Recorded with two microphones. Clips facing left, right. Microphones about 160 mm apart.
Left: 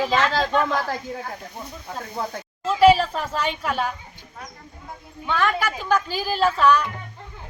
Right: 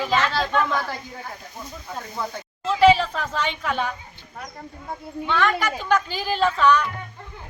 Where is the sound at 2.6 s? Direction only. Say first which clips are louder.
Left 1 dB; 10° left (ahead or behind).